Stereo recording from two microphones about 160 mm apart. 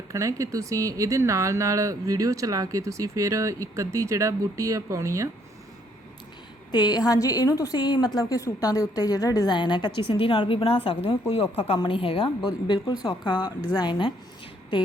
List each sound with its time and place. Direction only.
0.1 s speech: 20° right (ahead or behind)
6.7 s a woman's voice: 25° left (ahead or behind)